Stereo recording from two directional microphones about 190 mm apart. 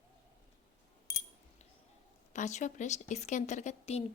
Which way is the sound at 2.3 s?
40° left (ahead or behind).